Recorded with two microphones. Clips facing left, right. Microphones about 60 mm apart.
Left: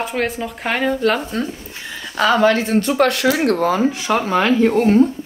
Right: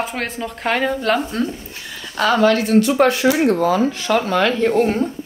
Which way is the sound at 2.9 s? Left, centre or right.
Left.